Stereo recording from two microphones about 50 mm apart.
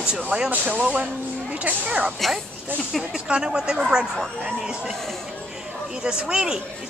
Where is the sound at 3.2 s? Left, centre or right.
Centre.